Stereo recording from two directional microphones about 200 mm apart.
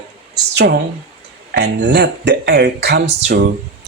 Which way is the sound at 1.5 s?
60° right (ahead or behind).